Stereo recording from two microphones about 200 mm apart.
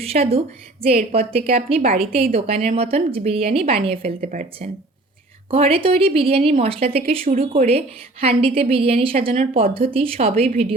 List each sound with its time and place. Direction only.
0.0 s a woman's voice: 30° right (ahead or behind)